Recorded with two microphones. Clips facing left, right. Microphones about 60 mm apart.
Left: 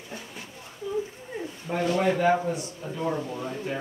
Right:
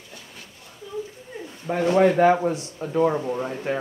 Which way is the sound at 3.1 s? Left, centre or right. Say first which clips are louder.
Right 5 dB; right.